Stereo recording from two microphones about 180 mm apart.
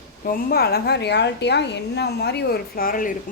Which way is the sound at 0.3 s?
55° left (ahead or behind).